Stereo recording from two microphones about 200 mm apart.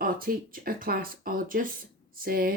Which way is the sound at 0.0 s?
45° right (ahead or behind).